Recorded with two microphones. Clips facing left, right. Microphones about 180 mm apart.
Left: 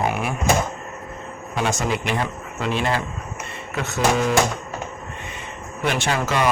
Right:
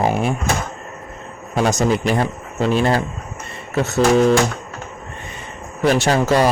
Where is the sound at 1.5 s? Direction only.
40° right (ahead or behind).